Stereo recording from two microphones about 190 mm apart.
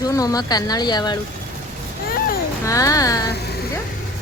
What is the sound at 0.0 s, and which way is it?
Speech, 20° left (ahead or behind).